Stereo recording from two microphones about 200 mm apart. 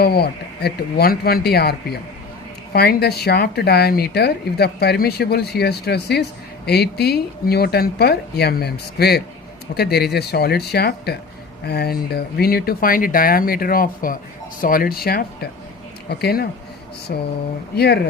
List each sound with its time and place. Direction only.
0.0 s speech: 50° left (ahead or behind)